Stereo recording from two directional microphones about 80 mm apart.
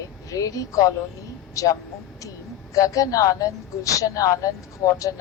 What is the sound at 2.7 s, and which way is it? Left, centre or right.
A woman's voice, left.